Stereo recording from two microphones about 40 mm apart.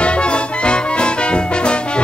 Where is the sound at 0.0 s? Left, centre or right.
Left.